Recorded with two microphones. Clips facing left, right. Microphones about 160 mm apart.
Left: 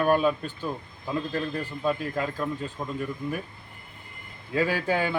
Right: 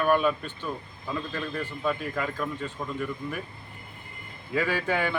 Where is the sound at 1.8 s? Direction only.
25° left (ahead or behind).